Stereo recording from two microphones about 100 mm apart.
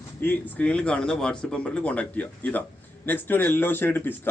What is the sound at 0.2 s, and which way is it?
A man's voice, 20° left (ahead or behind).